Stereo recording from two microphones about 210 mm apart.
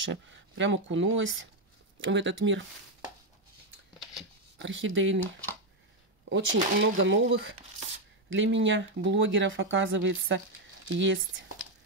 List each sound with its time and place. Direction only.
0.0 s speech: 60° right (ahead or behind)
4.0 s biting: centre (ahead or behind)
4.6 s speech: 60° right (ahead or behind)
6.2 s speech: 65° right (ahead or behind)